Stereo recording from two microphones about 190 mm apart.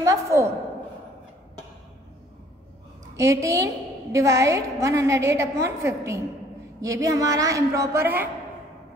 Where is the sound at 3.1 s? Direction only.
15° right (ahead or behind).